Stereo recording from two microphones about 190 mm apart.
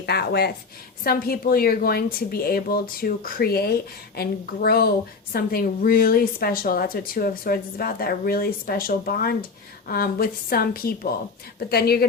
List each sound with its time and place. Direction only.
0.0 s a woman's voice: 60° left (ahead or behind)